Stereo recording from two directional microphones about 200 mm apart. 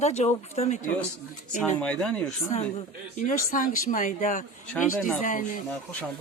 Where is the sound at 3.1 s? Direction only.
40° left (ahead or behind).